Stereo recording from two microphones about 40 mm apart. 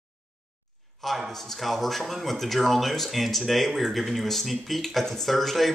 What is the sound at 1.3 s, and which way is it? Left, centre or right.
Speech, centre.